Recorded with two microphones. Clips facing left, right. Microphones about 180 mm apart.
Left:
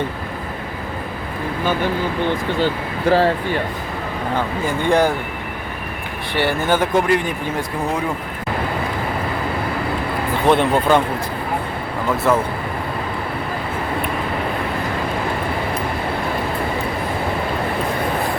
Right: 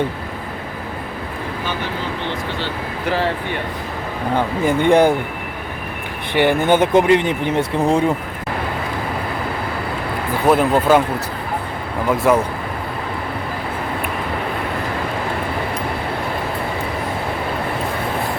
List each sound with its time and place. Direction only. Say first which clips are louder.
4.4 s speech: right 5 dB; 20° right (ahead or behind)
6.3 s speech: right 4 dB; 15° right (ahead or behind)
10.4 s speech: right 1 dB; 5° right (ahead or behind)
12.1 s speech: right 2 dB; 10° right (ahead or behind)